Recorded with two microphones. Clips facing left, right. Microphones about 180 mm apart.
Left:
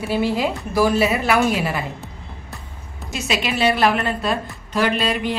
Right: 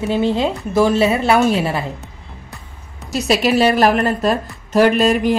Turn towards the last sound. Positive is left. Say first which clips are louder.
# right 7 dB
turn(degrees=-45)  # may be behind; listen again after turning